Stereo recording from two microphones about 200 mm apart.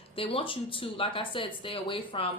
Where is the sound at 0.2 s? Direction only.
25° left (ahead or behind).